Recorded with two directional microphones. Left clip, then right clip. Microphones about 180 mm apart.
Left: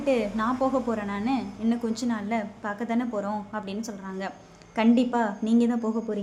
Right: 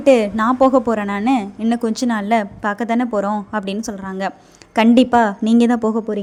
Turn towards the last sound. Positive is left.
turn(degrees=-50)  # may be behind; listen again after turning